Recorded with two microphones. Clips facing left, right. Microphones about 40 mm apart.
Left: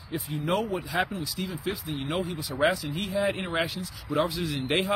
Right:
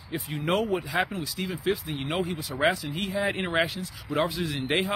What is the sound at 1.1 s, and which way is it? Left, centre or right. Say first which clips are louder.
Speech: right 1 dB; right.